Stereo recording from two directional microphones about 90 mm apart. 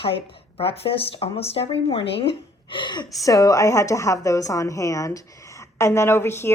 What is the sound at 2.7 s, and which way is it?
Speech, 60° left (ahead or behind).